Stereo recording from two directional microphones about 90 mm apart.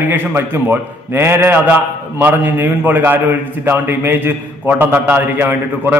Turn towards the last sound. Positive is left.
turn(degrees=-20)  # may be behind; listen again after turning